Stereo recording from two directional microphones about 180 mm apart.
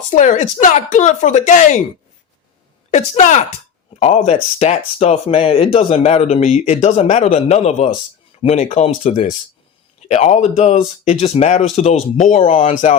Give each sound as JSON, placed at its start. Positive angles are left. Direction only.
{"t": 0.1, "sound": "speech", "side_deg": 45}
{"t": 2.9, "sound": "speech", "side_deg": 40}